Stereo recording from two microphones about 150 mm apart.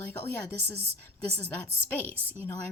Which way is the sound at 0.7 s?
90° right.